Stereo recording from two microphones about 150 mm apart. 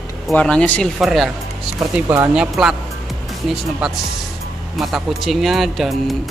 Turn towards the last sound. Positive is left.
turn(degrees=0)  # may be behind; listen again after turning